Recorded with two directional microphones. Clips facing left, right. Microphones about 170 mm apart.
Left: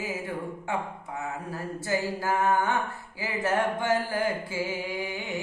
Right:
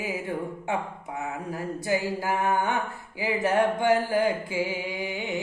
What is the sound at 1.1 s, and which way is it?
Music, 15° right (ahead or behind).